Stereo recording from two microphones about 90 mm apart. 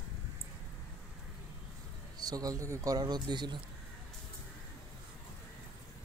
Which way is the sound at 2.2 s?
45° right (ahead or behind).